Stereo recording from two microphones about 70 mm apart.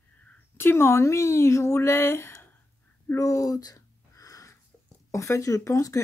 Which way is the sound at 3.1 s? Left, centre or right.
Left.